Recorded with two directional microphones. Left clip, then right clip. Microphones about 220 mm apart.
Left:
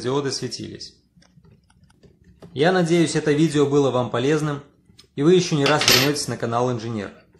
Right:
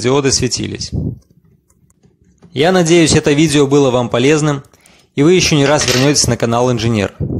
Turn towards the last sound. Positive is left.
turn(degrees=-40)  # may be behind; listen again after turning